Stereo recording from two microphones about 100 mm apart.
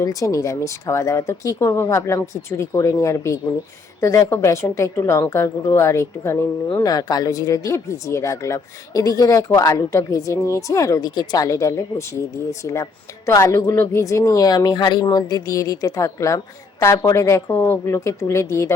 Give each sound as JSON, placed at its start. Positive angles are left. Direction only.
{"t": 0.0, "sound": "speech", "side_deg": 35}
{"t": 6.7, "sound": "speech", "side_deg": 40}